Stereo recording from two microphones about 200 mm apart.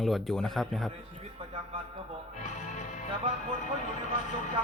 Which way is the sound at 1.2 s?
30° right (ahead or behind).